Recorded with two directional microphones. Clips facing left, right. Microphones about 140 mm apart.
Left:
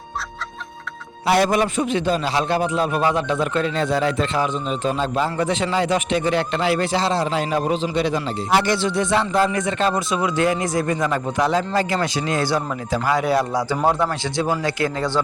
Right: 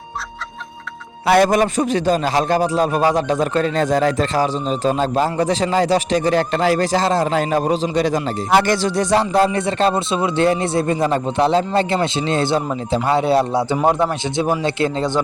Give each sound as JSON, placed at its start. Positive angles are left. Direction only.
{"t": 1.5, "sound": "speech", "side_deg": -40}
{"t": 8.4, "sound": "speech", "side_deg": -50}